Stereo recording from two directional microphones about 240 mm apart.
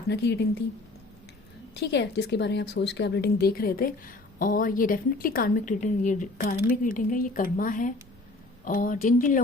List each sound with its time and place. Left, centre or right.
0.1 s a woman's voice: left
1.7 s a woman's voice: left